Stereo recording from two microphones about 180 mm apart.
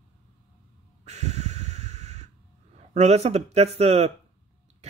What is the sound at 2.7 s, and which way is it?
Speech, 40° right (ahead or behind).